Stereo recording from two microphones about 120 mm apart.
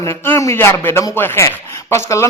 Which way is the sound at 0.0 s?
20° left (ahead or behind).